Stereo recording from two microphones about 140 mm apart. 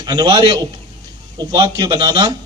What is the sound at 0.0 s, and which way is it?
A man's voice, 30° right (ahead or behind).